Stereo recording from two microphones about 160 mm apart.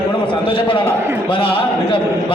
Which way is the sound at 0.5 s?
35° left (ahead or behind).